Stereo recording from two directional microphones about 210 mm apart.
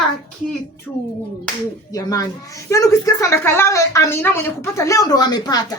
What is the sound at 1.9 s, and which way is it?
A woman's voice, 15° left (ahead or behind).